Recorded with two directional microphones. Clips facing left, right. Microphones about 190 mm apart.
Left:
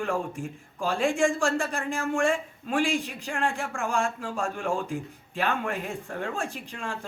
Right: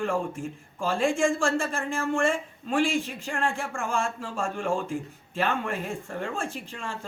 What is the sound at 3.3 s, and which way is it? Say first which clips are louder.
Speech: even; 15° left (ahead or behind).